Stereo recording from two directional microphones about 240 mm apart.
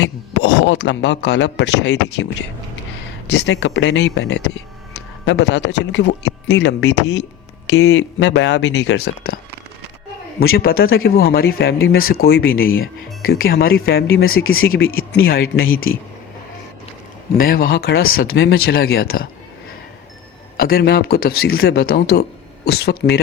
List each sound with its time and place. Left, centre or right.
0.0 s a man's voice: left
3.2 s speech: left
10.5 s speech: left
12.4 s speech: left
13.2 s speech: left
14.1 s speech: left
15.3 s speech: left
15.6 s speech: left
17.3 s speech: left
20.6 s speech: left